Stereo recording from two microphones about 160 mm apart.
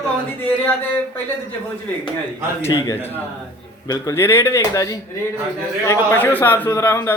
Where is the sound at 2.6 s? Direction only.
15° left (ahead or behind).